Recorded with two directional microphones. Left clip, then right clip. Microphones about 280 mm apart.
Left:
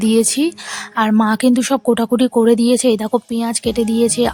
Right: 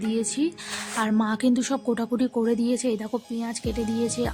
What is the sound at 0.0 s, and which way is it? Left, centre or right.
A woman's voice, left.